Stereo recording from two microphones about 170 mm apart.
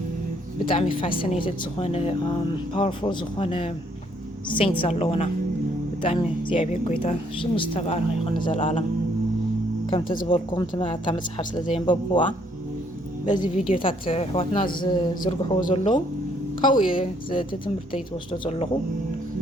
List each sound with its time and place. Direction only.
0.7 s speech: 30° left (ahead or behind)
10.0 s speech: 55° left (ahead or behind)
10.2 s speech: 30° left (ahead or behind)
13.6 s speech: 50° left (ahead or behind)
13.8 s speech: 30° left (ahead or behind)